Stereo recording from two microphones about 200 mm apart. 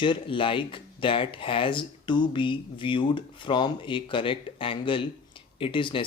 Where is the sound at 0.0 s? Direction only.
25° left (ahead or behind).